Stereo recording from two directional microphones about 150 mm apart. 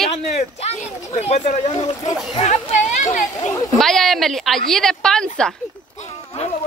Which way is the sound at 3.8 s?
Centre (ahead or behind).